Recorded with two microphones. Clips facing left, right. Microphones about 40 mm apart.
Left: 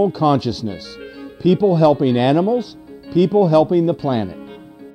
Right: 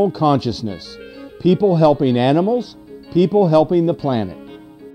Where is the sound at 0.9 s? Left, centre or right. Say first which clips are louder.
Left 1 dB; centre.